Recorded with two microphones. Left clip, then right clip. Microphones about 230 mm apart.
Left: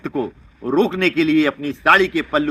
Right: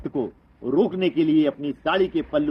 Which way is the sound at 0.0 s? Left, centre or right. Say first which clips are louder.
Left 3 dB; centre.